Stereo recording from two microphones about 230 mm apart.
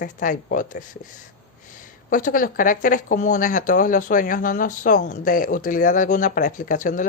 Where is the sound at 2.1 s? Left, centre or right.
Left.